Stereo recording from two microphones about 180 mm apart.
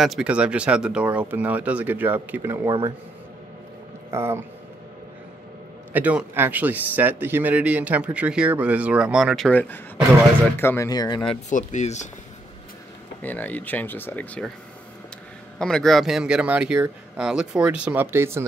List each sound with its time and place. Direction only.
0.0 s a man's voice: 5° right (ahead or behind)
4.1 s speech: 15° right (ahead or behind)
5.9 s a man's voice: 10° right (ahead or behind)
10.6 s speech: 15° left (ahead or behind)
11.4 s speech: 40° left (ahead or behind)
13.2 s speech: 10° left (ahead or behind)
15.6 s speech: 5° left (ahead or behind); by 18.5 s 15° right (ahead or behind)